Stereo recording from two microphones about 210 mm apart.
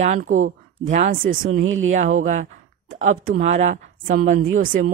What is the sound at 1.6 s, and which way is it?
Speech, 70° right (ahead or behind).